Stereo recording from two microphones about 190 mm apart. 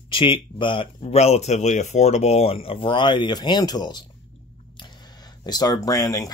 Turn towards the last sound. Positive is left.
turn(degrees=20)  # may be behind; listen again after turning